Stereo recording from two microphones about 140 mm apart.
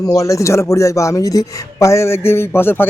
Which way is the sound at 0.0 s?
25° left (ahead or behind).